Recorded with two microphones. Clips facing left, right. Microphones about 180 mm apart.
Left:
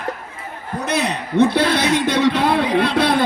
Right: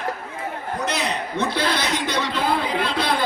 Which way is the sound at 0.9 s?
60° left (ahead or behind).